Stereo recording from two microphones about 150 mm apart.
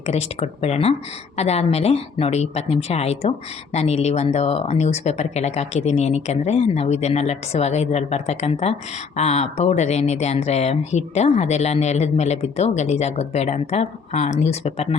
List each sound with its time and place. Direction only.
0.0 s speech: 45° left (ahead or behind)